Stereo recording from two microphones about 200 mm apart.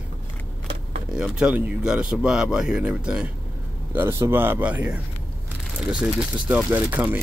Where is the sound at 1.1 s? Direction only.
5° right (ahead or behind).